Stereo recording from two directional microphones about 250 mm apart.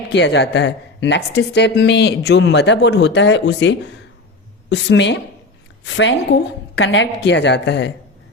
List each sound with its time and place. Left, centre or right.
0.1 s a woman's voice: left